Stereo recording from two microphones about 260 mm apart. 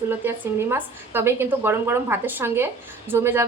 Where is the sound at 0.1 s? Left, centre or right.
Centre.